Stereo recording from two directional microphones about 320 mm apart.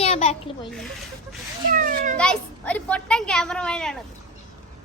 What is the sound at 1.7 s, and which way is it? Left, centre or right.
Cat, right.